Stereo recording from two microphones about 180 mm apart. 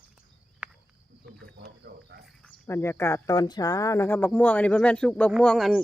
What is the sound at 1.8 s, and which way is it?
Cricket, 65° right (ahead or behind).